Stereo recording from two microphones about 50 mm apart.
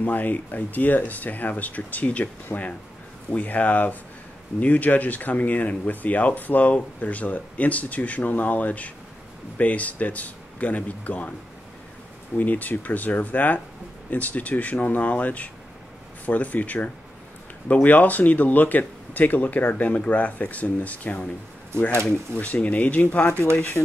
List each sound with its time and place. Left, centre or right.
0.0 s speech: left
12.4 s speech: left